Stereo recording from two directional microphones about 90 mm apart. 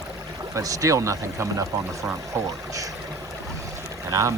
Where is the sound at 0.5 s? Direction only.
40° right (ahead or behind).